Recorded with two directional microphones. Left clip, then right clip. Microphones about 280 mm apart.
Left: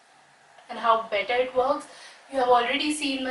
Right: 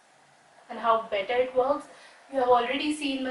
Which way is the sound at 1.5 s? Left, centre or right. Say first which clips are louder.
Left 1 dB; centre.